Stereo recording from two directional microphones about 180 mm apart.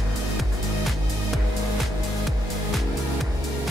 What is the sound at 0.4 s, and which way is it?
Music, centre (ahead or behind).